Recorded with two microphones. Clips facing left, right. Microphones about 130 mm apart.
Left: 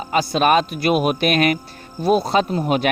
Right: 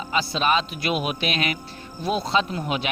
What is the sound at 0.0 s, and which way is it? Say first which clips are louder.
Speech: left 6 dB; 45° left (ahead or behind).